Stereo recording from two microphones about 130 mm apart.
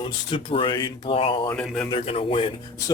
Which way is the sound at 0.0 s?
40° left (ahead or behind).